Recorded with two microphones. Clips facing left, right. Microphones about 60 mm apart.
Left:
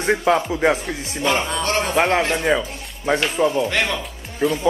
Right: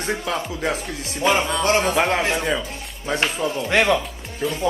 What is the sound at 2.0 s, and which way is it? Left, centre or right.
Speech, centre.